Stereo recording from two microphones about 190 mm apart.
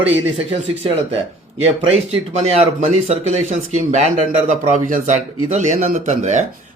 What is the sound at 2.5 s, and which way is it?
A man's voice, 35° right (ahead or behind).